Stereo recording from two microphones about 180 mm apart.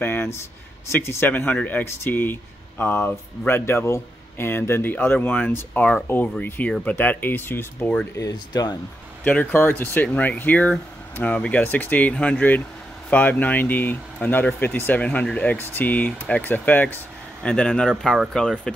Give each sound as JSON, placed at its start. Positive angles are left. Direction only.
{"t": 0.0, "sound": "speech", "side_deg": 10}
{"t": 8.2, "sound": "speech", "side_deg": 20}
{"t": 9.2, "sound": "speech", "side_deg": 10}